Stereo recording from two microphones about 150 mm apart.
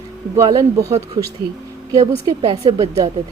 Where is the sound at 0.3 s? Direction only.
20° right (ahead or behind).